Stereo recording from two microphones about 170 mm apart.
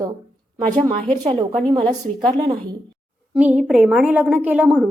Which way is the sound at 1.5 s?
30° right (ahead or behind).